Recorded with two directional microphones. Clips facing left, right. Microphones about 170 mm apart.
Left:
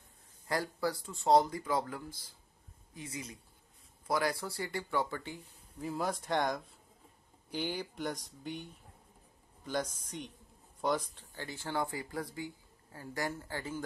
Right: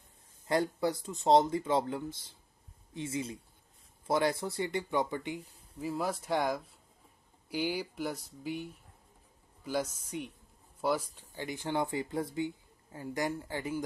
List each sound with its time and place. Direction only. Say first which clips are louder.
0.5 s speech: right 4 dB; 20° right (ahead or behind)
5.8 s speech: right 2 dB; centre (ahead or behind)
9.6 s a sound: right 2 dB; 5° right (ahead or behind)
10.0 s speech: right 5 dB; 5° right (ahead or behind)